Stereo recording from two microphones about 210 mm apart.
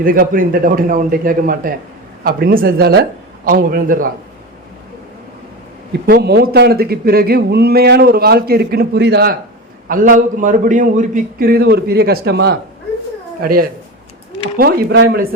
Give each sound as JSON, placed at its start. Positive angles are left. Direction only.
{"t": 0.0, "sound": "a man's voice", "side_deg": -40}
{"t": 5.9, "sound": "a man's voice", "side_deg": -50}
{"t": 9.9, "sound": "a man's voice", "side_deg": -40}
{"t": 14.6, "sound": "a man's voice", "side_deg": -45}